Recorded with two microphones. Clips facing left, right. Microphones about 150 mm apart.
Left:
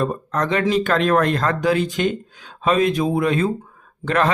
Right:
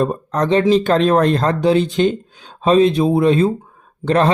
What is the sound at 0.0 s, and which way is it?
Speech, 35° right (ahead or behind).